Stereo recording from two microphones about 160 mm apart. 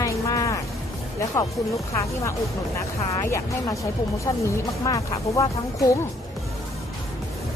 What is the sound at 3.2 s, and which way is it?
Speech, 20° left (ahead or behind).